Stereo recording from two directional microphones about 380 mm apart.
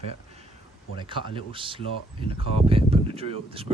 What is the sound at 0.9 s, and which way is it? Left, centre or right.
Speech, centre.